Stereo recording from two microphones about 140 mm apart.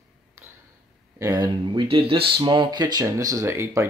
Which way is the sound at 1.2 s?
25° right (ahead or behind).